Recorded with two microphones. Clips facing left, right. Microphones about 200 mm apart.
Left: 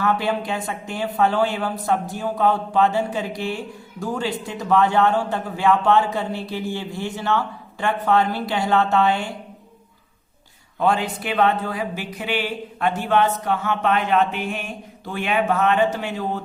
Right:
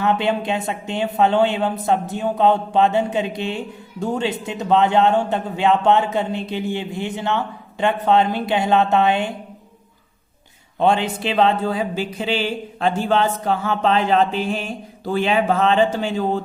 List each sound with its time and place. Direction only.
0.0 s speech: 20° right (ahead or behind)
10.8 s speech: 25° right (ahead or behind)